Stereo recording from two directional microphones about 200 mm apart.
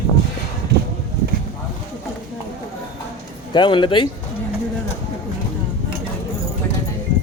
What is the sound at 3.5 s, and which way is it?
Speech, 25° left (ahead or behind).